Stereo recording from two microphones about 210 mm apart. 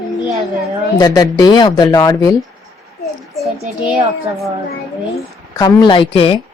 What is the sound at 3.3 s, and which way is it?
Speech, centre (ahead or behind).